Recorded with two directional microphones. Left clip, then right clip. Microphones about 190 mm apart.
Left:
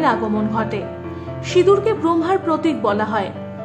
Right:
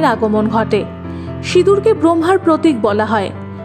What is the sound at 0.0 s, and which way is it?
A woman's voice, 35° right (ahead or behind).